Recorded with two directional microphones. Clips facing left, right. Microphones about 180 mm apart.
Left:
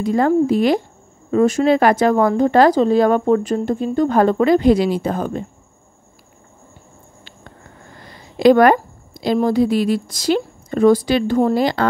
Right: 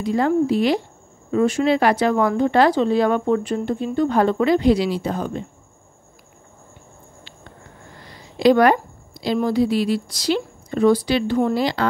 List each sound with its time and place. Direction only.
0.0 s speech: 45° left (ahead or behind)
8.4 s speech: 50° left (ahead or behind)